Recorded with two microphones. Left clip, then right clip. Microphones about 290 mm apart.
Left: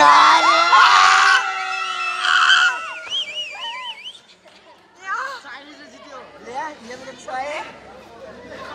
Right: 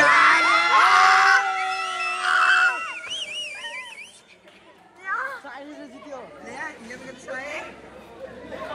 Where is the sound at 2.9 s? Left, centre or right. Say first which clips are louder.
Left 5 dB; left.